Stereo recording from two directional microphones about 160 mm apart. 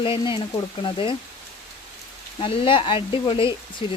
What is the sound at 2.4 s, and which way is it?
Speech, 30° left (ahead or behind).